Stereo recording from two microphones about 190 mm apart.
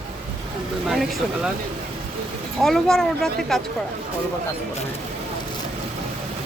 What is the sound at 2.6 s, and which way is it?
A woman's voice, centre (ahead or behind).